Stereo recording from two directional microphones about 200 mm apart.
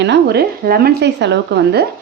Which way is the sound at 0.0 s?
55° right (ahead or behind).